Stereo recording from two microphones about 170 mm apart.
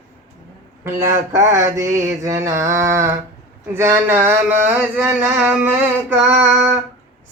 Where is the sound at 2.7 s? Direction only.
20° right (ahead or behind).